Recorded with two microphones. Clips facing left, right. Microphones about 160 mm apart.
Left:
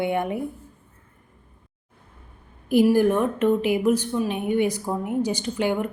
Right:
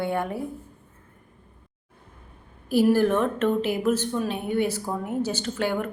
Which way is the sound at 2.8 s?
10° left (ahead or behind).